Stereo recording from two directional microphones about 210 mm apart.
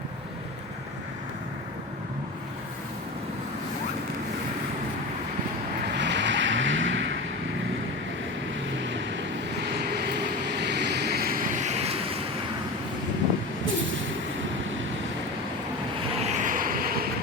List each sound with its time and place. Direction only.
6.0 s vehicle: 55° right (ahead or behind)
8.8 s vehicle: 60° right (ahead or behind); by 12.2 s 30° right (ahead or behind)
16.2 s vehicle: 35° right (ahead or behind)